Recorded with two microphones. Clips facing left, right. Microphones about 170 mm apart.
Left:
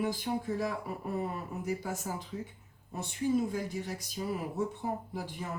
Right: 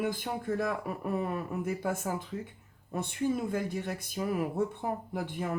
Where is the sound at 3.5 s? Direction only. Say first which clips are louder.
Right 3 dB; 60° right (ahead or behind).